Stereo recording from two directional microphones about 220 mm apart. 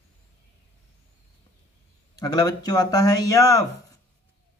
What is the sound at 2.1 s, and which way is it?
Speech, 20° left (ahead or behind).